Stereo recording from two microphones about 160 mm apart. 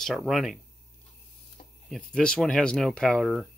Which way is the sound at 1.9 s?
5° left (ahead or behind).